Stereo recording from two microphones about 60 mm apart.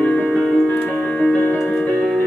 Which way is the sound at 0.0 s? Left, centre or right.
Left.